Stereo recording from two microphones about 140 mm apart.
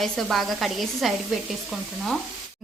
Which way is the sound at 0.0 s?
Centre (ahead or behind).